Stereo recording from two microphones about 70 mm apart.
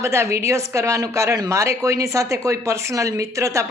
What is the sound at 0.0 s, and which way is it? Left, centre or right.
A man's voice, right.